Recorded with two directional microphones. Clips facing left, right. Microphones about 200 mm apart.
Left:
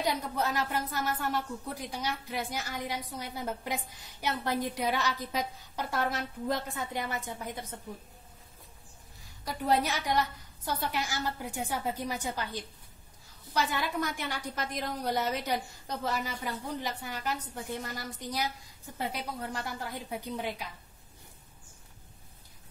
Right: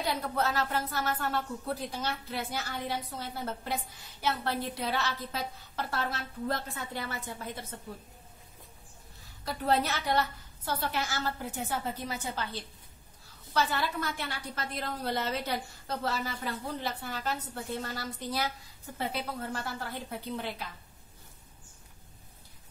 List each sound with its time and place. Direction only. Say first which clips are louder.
0.0 s a woman's voice: even; 15° left (ahead or behind)
9.4 s a woman's voice: even; 15° left (ahead or behind)